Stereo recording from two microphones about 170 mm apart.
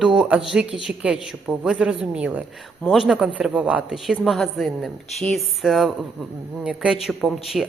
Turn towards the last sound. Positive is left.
turn(degrees=0)  # may be behind; listen again after turning